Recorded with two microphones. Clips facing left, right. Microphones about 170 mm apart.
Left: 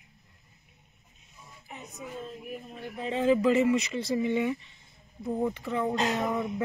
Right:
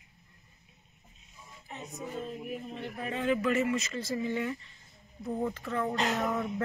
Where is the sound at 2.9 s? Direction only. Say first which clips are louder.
Left 6 dB; 25° left (ahead or behind).